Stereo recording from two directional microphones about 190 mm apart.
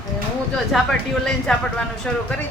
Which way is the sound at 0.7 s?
5° left (ahead or behind).